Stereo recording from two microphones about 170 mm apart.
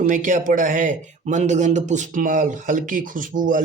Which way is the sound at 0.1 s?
50° right (ahead or behind).